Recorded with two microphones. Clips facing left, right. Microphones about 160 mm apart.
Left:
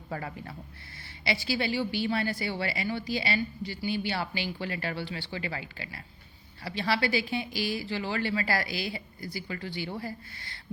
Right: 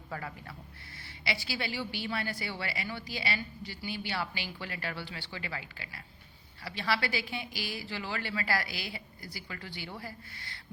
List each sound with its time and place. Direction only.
0.1 s a woman's voice: 35° left (ahead or behind)